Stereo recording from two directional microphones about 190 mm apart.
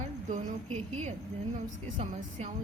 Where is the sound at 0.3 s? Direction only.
35° right (ahead or behind).